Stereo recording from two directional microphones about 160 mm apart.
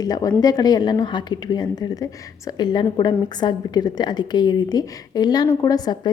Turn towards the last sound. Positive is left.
turn(degrees=25)  # may be behind; listen again after turning